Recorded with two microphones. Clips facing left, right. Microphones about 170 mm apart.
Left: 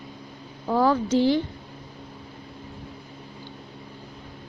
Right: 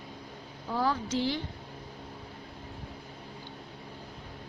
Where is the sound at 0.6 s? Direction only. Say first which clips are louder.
Left 9 dB; 90° left.